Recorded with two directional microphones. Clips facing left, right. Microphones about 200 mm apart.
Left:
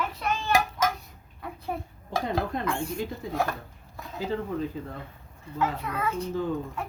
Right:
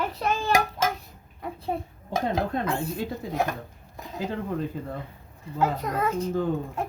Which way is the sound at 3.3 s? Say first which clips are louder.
Right 1 dB; 20° right (ahead or behind).